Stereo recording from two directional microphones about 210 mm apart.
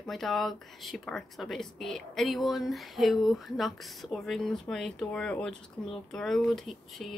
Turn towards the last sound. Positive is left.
turn(degrees=0)  # may be behind; listen again after turning